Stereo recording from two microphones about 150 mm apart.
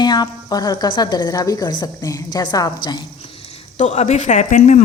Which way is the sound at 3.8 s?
45° left (ahead or behind).